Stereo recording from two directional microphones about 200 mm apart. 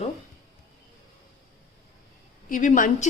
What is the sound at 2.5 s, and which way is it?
Speech, 40° left (ahead or behind).